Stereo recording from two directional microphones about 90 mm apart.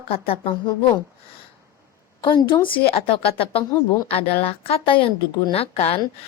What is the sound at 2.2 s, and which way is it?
A woman's voice, 65° left (ahead or behind).